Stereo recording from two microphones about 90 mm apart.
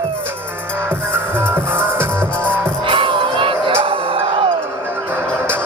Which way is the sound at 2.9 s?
70° right (ahead or behind).